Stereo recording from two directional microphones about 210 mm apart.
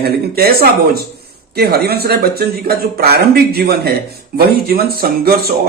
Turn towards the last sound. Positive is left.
turn(degrees=-45)  # may be behind; listen again after turning